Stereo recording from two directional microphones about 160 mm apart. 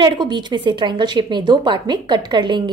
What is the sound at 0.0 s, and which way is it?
A woman's voice, 30° right (ahead or behind).